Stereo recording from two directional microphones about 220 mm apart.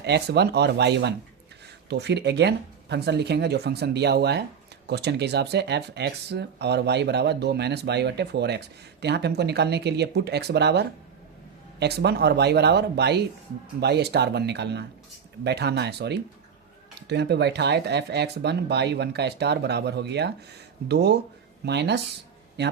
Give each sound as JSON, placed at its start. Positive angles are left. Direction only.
{"t": 0.0, "sound": "speech", "side_deg": -50}